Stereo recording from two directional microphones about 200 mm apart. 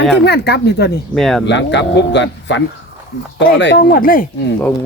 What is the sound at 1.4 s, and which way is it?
Speech, 60° left (ahead or behind).